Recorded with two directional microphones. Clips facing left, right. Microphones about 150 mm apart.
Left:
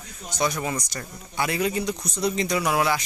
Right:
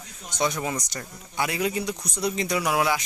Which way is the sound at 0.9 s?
10° right (ahead or behind).